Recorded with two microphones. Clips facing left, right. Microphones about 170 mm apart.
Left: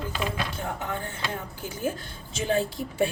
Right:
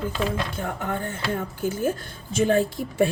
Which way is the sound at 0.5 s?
50° right (ahead or behind).